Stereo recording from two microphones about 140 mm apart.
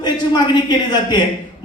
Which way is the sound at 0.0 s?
30° left (ahead or behind).